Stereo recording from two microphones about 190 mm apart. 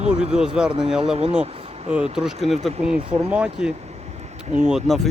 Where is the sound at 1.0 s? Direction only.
30° right (ahead or behind).